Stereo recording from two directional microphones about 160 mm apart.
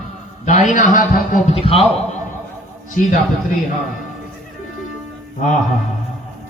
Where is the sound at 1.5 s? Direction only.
35° left (ahead or behind).